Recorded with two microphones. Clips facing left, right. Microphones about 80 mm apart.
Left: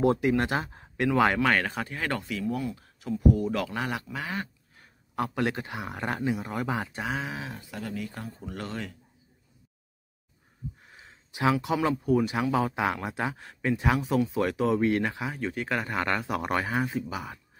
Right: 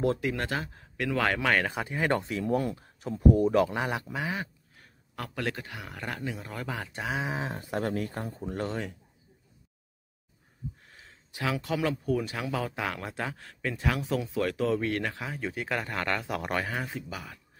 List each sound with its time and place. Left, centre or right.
0.0 s speech: centre
1.1 s speech: centre
1.4 s speech: centre; by 2.4 s right
2.4 s speech: right
2.7 s speech: right; by 4.5 s centre
5.1 s speech: left
6.3 s speech: centre
6.9 s speech: centre
7.2 s speech: right
7.4 s speech: right
8.5 s speech: centre
10.9 s a sound: centre
11.6 s speech: centre